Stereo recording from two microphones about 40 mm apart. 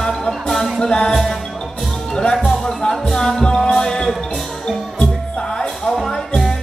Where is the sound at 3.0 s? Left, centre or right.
Centre.